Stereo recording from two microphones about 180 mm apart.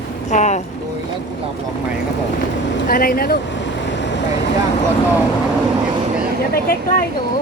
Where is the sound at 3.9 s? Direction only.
80° left.